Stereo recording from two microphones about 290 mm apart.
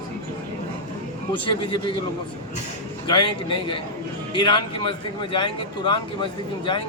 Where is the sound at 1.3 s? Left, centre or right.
Centre.